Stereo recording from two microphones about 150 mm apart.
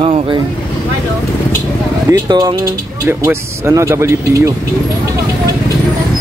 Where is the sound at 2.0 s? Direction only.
30° right (ahead or behind).